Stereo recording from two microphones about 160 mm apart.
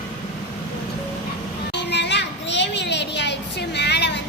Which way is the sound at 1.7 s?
90° left.